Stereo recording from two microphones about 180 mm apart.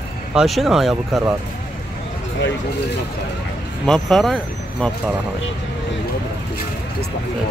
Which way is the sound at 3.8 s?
5° left (ahead or behind).